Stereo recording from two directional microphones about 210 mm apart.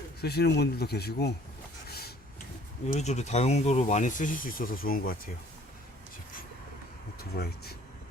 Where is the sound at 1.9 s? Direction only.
50° left (ahead or behind).